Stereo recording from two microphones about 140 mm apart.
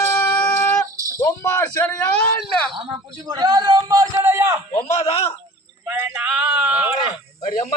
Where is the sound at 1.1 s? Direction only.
20° left (ahead or behind).